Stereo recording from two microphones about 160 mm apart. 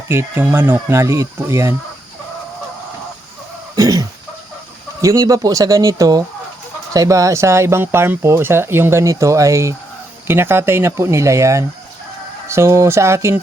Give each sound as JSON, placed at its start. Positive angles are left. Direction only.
{"t": 0.1, "sound": "speech", "side_deg": -15}
{"t": 3.8, "sound": "cough", "side_deg": -20}
{"t": 4.9, "sound": "speech", "side_deg": -20}